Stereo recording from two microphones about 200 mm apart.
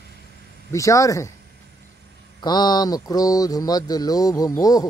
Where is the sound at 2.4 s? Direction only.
20° left (ahead or behind).